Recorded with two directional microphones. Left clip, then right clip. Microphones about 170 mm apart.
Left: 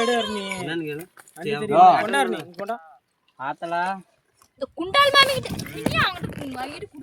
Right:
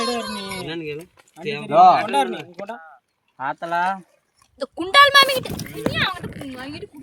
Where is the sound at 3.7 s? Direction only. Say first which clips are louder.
Right 4 dB; 70° right (ahead or behind).